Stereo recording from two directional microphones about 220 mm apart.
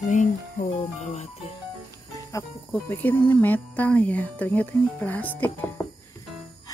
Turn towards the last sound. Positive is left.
turn(degrees=10)  # may be behind; listen again after turning